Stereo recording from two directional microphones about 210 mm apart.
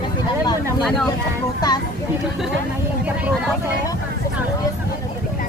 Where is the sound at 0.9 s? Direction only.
Centre (ahead or behind).